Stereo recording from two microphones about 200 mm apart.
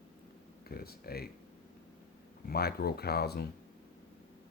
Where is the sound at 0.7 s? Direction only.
50° left (ahead or behind).